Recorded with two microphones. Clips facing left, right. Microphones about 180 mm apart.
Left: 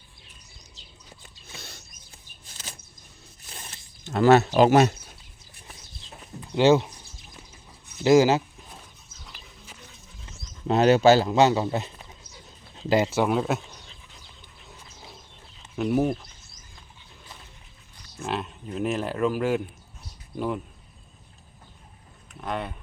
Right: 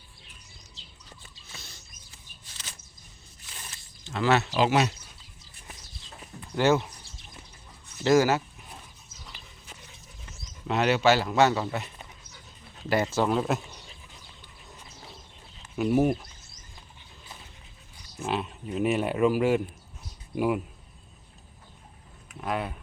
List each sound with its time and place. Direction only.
1.6 s mechanisms: 65° left (ahead or behind)
4.0 s speech: 45° left (ahead or behind)
6.5 s speech: 20° left (ahead or behind)
8.0 s speech: 15° left (ahead or behind)
9.2 s dog: 5° left (ahead or behind)
10.7 s speech: 35° left (ahead or behind)
12.3 s a sound: 20° left (ahead or behind)
13.1 s speech: 10° left (ahead or behind)
15.7 s speech: 5° right (ahead or behind)
18.2 s speech: centre (ahead or behind)
22.3 s speech: 5° right (ahead or behind)